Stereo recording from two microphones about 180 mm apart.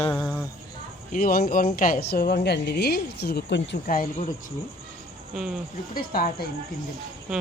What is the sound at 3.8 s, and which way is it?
Speech, 50° left (ahead or behind).